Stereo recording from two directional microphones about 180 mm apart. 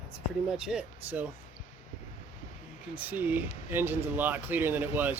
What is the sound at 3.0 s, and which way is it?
Speech, 10° right (ahead or behind).